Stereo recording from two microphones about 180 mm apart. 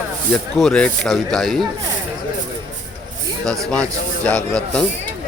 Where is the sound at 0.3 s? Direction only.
Centre (ahead or behind).